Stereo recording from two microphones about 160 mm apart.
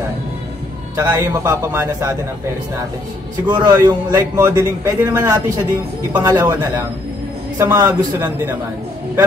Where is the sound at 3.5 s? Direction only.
15° right (ahead or behind).